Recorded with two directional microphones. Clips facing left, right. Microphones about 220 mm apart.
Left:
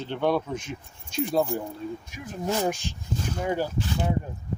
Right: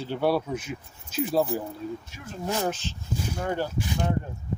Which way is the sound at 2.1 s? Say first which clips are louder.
Left 2 dB; 15° left (ahead or behind).